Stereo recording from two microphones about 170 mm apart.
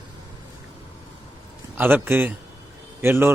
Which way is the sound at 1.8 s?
10° right (ahead or behind).